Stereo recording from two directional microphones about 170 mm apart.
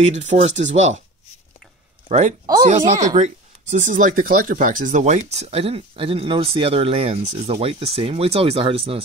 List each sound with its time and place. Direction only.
0.0 s speech: 40° right (ahead or behind)
2.0 s speech: 40° right (ahead or behind)